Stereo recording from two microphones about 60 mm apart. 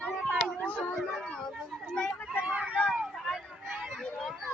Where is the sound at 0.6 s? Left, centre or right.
Left.